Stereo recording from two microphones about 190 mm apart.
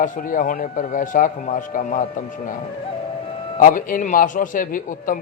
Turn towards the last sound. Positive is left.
turn(degrees=45)  # may be behind; listen again after turning